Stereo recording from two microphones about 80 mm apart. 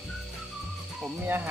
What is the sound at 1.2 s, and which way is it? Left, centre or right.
Speech, right.